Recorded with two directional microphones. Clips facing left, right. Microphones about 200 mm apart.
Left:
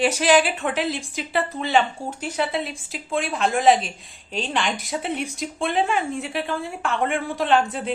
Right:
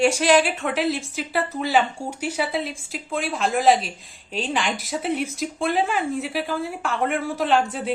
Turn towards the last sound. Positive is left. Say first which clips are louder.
# even
turn(degrees=0)  # may be behind; listen again after turning